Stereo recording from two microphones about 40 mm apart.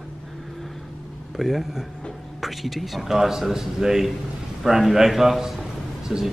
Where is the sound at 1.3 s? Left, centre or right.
Centre.